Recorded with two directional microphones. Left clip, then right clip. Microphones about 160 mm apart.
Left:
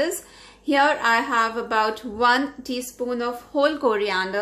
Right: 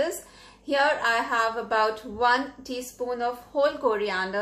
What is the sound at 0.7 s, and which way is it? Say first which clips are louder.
A woman's voice: left 4 dB; 40° left (ahead or behind).